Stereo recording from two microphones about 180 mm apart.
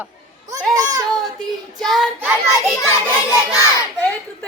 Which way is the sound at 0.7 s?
20° right (ahead or behind).